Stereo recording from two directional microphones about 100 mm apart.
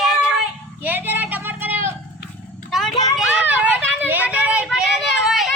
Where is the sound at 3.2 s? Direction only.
15° right (ahead or behind).